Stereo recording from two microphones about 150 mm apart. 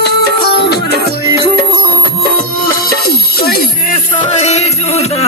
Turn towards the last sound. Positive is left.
turn(degrees=50)  # may be behind; listen again after turning